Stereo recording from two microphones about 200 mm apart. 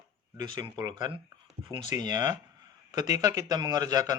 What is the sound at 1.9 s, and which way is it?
Speech, 35° left (ahead or behind).